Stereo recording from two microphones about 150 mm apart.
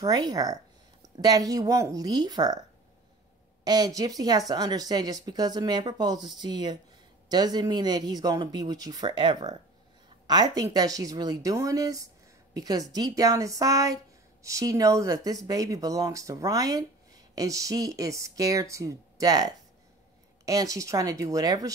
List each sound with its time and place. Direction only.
0.0 s speech: 25° right (ahead or behind)
3.6 s speech: 25° right (ahead or behind)